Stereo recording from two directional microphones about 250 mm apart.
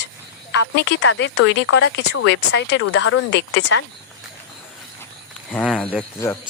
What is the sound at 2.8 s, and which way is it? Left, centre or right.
Speech, left.